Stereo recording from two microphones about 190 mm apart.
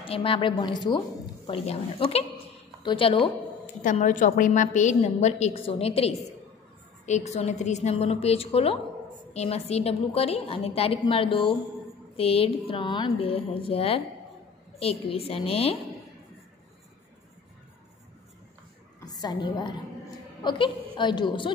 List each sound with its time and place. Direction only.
0.0 s a woman's voice: 30° left (ahead or behind)
3.8 s a woman's voice: 40° left (ahead or behind)
18.9 s a woman's voice: 20° left (ahead or behind)